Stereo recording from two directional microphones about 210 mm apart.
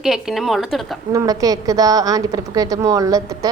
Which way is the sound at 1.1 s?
15° right (ahead or behind).